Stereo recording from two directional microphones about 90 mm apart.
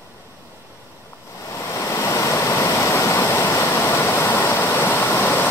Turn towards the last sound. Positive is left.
turn(degrees=20)  # may be behind; listen again after turning